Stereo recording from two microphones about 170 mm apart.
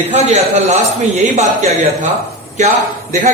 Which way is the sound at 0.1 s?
40° right (ahead or behind).